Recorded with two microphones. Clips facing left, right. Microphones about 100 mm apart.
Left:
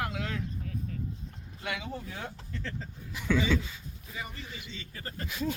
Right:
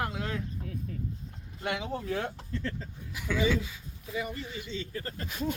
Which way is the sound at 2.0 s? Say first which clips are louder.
Right 7 dB; 70° right (ahead or behind).